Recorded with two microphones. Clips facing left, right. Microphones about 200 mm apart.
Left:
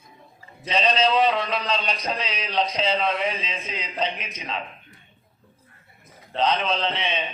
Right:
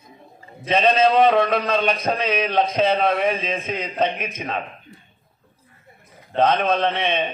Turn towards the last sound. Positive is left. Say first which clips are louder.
# right 6 dB
turn(degrees=-55)  # may be behind; listen again after turning